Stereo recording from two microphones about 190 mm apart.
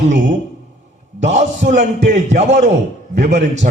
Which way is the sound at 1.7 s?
40° right (ahead or behind).